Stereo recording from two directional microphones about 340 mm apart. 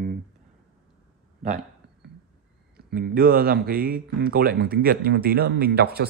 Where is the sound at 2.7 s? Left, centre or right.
Right.